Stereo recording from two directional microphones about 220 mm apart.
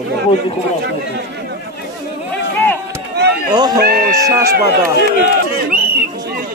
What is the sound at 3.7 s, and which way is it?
Speech, 45° right (ahead or behind).